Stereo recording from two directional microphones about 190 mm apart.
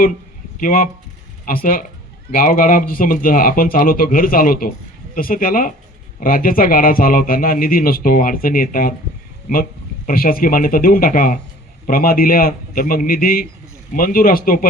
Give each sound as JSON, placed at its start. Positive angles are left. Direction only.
{"t": 0.6, "sound": "a man's voice", "side_deg": 45}
{"t": 10.1, "sound": "a man's voice", "side_deg": 50}